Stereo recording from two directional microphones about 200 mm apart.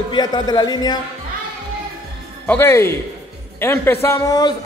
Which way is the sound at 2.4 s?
10° left (ahead or behind).